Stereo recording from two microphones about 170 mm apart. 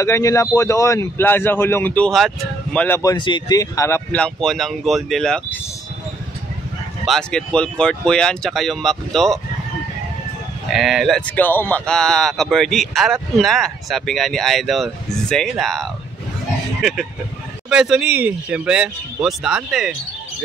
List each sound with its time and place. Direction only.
0.0 s a man's voice: 15° left (ahead or behind)
3.0 s a man's voice: 25° left (ahead or behind); by 5.6 s 5° left (ahead or behind)
7.1 s speech: 5° left (ahead or behind)
10.7 s speech: centre (ahead or behind)